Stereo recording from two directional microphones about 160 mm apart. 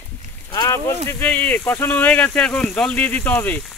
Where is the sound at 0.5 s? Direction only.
20° left (ahead or behind).